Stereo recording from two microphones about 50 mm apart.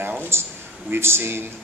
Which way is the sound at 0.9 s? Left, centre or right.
Right.